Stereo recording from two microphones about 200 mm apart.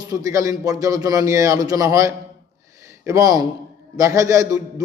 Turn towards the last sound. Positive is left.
turn(degrees=-15)  # may be behind; listen again after turning